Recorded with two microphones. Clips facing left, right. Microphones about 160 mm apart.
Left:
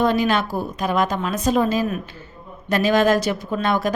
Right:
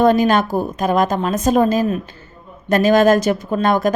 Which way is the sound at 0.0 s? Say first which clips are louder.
Right 5 dB; 45° right (ahead or behind).